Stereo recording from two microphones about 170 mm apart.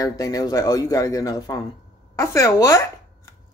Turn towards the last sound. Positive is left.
turn(degrees=20)  # may be behind; listen again after turning